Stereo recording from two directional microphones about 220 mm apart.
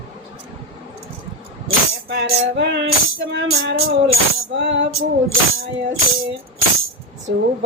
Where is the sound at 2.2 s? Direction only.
55° right (ahead or behind).